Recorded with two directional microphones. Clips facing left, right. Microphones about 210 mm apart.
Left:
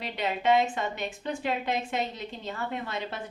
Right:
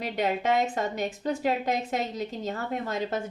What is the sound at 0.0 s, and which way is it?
A woman's voice, 45° right (ahead or behind).